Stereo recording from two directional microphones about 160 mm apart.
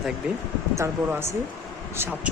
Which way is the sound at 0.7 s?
15° right (ahead or behind).